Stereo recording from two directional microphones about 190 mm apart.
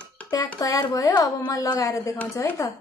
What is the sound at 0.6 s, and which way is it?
A woman's voice, 20° left (ahead or behind).